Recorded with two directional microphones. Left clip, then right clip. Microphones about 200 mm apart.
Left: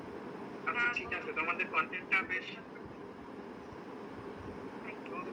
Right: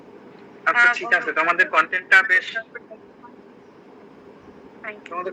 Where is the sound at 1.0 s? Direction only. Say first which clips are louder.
Right 16 dB; 40° right (ahead or behind).